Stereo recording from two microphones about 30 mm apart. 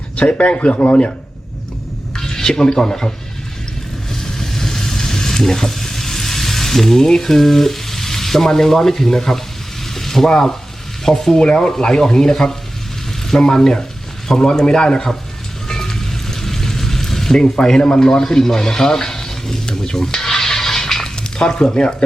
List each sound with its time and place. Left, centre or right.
0.2 s speech: left
2.1 s speech: centre
4.1 s frying: centre
11.0 s speech: centre
11.3 s a man's voice: left
15.6 s water: centre
17.6 s a man's voice: left